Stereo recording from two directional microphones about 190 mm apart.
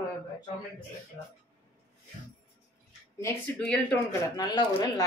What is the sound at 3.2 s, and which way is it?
Speech, 10° left (ahead or behind).